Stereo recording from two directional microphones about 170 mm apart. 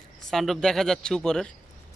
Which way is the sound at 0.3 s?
Centre (ahead or behind).